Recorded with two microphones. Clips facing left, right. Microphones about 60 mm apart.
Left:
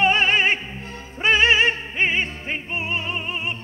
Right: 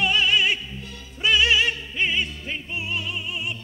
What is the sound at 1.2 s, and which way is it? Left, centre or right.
Music, left.